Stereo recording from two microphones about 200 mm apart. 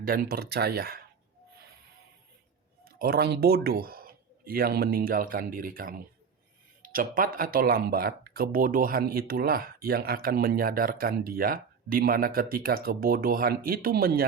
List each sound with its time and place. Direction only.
0.0 s speech: 45° right (ahead or behind)
2.8 s speech: 50° right (ahead or behind)